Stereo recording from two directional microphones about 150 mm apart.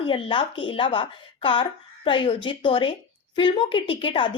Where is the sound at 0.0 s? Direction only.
35° left (ahead or behind).